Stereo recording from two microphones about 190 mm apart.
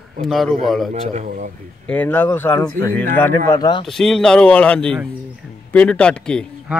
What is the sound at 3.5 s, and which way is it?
Speech, 20° left (ahead or behind).